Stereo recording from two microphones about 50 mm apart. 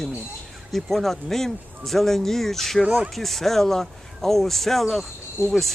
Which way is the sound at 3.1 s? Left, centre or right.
Centre.